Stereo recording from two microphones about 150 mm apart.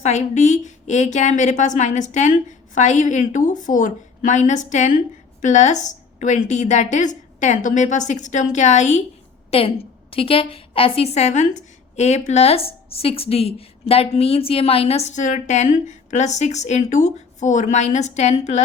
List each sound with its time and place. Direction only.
0.0 s a woman's voice: 50° left (ahead or behind)
9.5 s a woman's voice: 40° left (ahead or behind)